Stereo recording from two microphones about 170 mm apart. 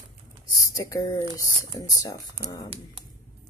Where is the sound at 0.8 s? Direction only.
20° left (ahead or behind).